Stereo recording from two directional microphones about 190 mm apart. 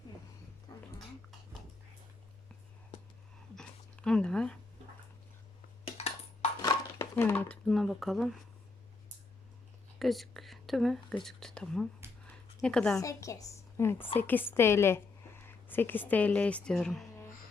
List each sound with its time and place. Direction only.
0.7 s dog: 20° left (ahead or behind)
3.5 s a sound: 5° left (ahead or behind)
5.8 s cutlery: 30° left (ahead or behind)
6.6 s speech: 15° left (ahead or behind); by 8.4 s centre (ahead or behind)
10.0 s speech: centre (ahead or behind)
12.3 s a sound: 5° left (ahead or behind)
13.0 s a woman's voice: 15° left (ahead or behind)